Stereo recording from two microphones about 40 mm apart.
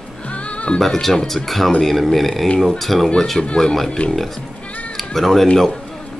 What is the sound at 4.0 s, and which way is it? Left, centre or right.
Speech, left.